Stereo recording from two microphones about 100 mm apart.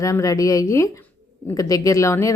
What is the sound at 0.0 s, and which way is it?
A woman's voice, 30° left (ahead or behind).